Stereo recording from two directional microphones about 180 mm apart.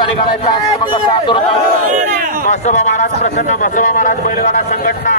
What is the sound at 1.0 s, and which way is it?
Speech, 25° left (ahead or behind).